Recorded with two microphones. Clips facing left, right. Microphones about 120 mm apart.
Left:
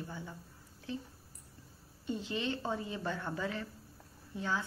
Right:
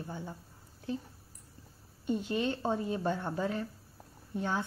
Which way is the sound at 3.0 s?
20° right (ahead or behind).